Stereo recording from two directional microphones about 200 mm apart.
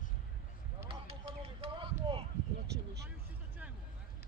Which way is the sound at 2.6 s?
55° right (ahead or behind).